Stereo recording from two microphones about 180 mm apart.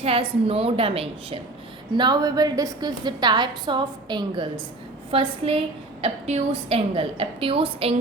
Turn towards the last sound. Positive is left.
turn(degrees=-30)  # may be behind; listen again after turning